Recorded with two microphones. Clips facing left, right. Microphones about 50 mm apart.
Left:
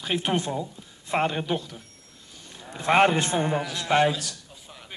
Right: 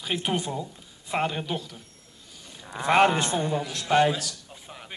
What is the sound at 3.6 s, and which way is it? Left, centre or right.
Speech, centre.